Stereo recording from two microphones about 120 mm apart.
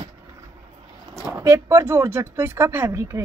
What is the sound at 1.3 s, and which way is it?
Speech, 25° right (ahead or behind).